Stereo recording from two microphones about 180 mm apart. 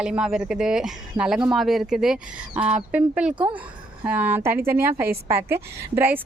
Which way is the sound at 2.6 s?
35° right (ahead or behind).